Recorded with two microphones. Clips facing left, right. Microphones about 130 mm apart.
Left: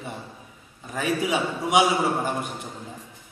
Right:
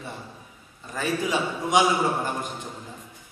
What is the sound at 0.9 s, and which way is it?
Speech, 15° left (ahead or behind).